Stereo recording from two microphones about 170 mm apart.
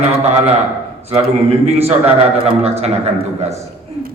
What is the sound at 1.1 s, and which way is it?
A man's voice, 40° right (ahead or behind).